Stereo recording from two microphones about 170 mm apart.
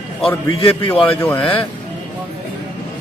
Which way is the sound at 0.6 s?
25° left (ahead or behind).